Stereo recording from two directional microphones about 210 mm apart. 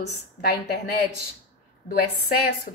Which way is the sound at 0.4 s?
50° left (ahead or behind).